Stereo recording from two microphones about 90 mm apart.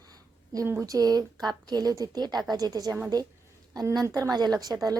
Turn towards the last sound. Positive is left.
turn(degrees=-45)  # may be behind; listen again after turning